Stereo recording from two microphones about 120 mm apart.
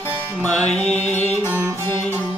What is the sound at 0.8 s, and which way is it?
Music, 65° left (ahead or behind).